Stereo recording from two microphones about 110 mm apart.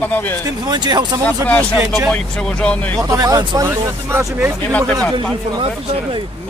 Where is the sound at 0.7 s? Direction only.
40° right (ahead or behind).